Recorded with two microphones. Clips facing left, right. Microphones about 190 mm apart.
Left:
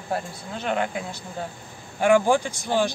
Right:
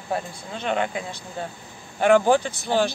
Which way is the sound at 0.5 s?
5° left (ahead or behind).